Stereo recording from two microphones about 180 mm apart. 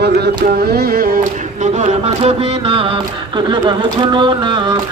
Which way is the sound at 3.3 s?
25° right (ahead or behind).